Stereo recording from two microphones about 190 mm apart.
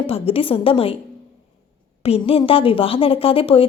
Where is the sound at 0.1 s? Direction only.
30° left (ahead or behind).